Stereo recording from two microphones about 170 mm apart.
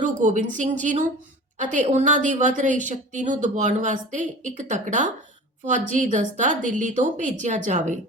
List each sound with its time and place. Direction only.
0.0 s a woman's voice: 45° right (ahead or behind)